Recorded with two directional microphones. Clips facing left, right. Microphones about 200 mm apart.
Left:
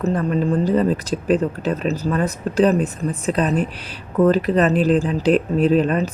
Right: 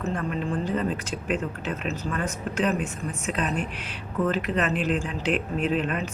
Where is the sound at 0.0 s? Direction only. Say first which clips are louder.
Left 9 dB; 40° left (ahead or behind).